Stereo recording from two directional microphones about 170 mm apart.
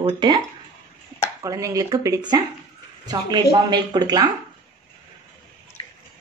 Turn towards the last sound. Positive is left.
turn(degrees=-25)  # may be behind; listen again after turning